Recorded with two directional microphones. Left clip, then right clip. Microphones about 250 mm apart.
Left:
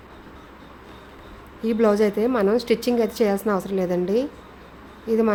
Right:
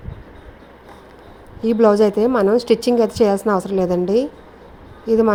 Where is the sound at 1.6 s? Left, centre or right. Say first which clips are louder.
Right 6 dB; centre.